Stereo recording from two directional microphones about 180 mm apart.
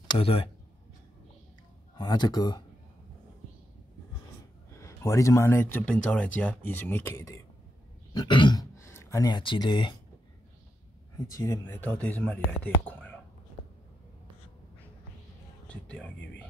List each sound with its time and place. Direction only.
0.1 s speech: 30° left (ahead or behind)
2.0 s speech: 20° left (ahead or behind)
4.7 s speech: 15° left (ahead or behind)
11.2 s speech: 20° left (ahead or behind)
12.8 s whispering: 10° left (ahead or behind)
15.7 s speech: 5° left (ahead or behind)